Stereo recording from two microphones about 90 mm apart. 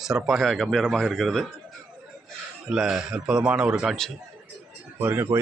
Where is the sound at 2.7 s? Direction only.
5° right (ahead or behind).